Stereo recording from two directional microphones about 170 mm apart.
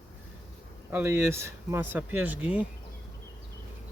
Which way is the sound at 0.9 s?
15° right (ahead or behind).